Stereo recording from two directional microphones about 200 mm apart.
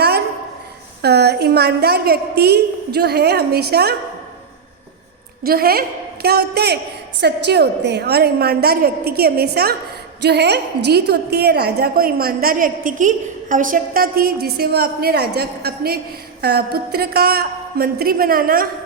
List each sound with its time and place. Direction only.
1.0 s a woman's voice: 55° right (ahead or behind)
5.4 s a woman's voice: 50° right (ahead or behind)